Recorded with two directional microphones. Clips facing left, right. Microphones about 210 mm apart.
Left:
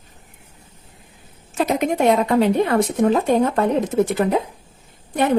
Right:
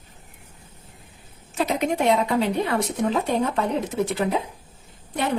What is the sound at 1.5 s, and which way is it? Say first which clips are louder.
A woman's voice: left 4 dB; 50° left (ahead or behind).